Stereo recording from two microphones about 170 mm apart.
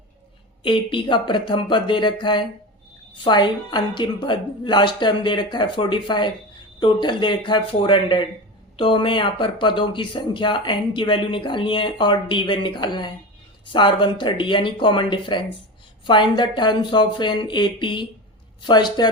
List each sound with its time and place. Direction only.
0.6 s speech: 30° left (ahead or behind)